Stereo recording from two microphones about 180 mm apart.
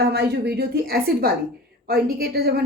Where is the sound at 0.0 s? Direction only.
65° right (ahead or behind).